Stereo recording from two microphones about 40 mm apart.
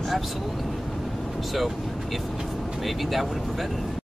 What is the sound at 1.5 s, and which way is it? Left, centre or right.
Speech, centre.